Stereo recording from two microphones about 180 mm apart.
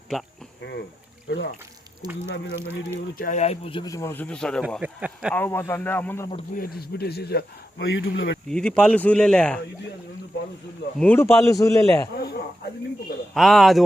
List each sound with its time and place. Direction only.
0.6 s a sound: 70° left (ahead or behind)
2.2 s speech: 90° left
3.2 s speech: 45° left (ahead or behind)
3.8 s a man's voice: 15° left (ahead or behind)
4.8 s speech: 5° right (ahead or behind)
5.3 s a man's voice: 10° left (ahead or behind)
6.6 s speech: 60° left (ahead or behind); by 8.4 s 80° left
8.4 s speech: 5° left (ahead or behind)
10.9 s a man's voice: 10° left (ahead or behind)
12.1 s a sound: 65° left (ahead or behind)
13.3 s speech: centre (ahead or behind)